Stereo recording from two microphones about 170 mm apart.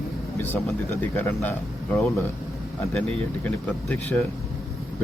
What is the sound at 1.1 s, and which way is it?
Speech, 10° left (ahead or behind).